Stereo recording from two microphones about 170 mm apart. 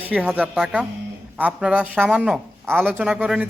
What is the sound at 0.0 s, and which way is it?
A woman's voice, 5° right (ahead or behind).